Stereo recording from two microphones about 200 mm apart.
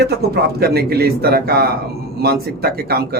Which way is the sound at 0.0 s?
50° right (ahead or behind).